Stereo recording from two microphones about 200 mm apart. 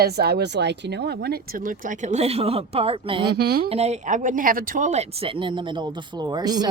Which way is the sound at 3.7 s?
30° right (ahead or behind).